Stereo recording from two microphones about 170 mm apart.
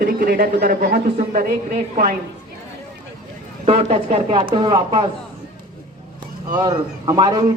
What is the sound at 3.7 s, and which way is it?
Speech, 35° right (ahead or behind).